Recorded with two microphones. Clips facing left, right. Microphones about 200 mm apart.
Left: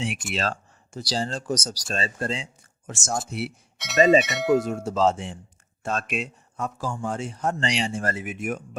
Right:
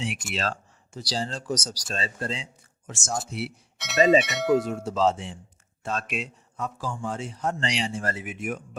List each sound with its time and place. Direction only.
0.3 s speech: 50° left (ahead or behind)
3.8 s bell: centre (ahead or behind)
4.7 s speech: 45° left (ahead or behind)